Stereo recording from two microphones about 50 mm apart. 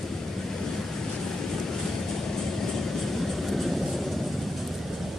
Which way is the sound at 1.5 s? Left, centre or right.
Centre.